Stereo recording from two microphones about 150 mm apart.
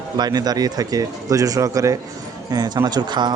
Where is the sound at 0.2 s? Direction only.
25° right (ahead or behind).